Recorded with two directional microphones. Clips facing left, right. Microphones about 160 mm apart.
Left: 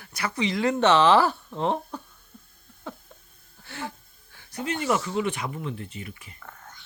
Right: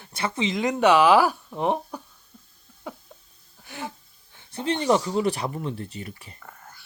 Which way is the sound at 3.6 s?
15° right (ahead or behind).